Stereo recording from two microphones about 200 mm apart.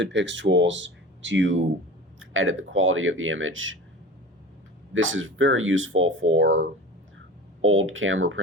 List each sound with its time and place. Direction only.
0.0 s speech: 65° right (ahead or behind)
2.1 s speech: 80° right
4.9 s speech: 75° right (ahead or behind)
7.6 s speech: 85° right